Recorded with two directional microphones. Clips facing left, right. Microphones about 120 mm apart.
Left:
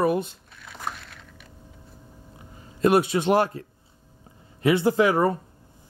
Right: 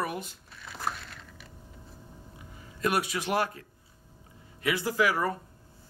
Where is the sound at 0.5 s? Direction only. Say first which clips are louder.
Right 1 dB; centre (ahead or behind).